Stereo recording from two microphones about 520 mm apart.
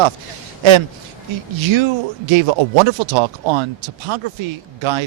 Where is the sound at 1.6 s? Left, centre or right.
Right.